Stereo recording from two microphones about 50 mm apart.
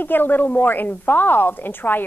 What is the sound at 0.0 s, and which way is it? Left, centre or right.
A woman's voice, left.